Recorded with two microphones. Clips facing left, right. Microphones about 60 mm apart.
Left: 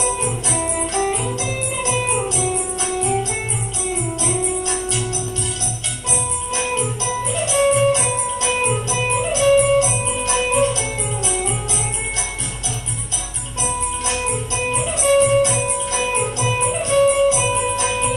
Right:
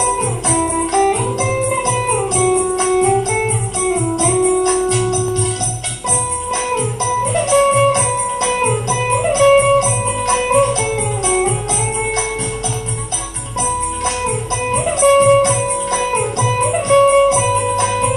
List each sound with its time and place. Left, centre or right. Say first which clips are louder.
0.0 s guitar: right 5 dB; right
2.8 s organ: right 6 dB; right
3.9 s music: right 7 dB; right
6.5 s music: right 3 dB; right
14.0 s guitar: right 4 dB; right
16.3 s music: right 4 dB; right